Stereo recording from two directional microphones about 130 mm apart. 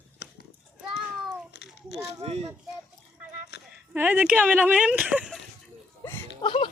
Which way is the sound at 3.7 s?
15° right (ahead or behind).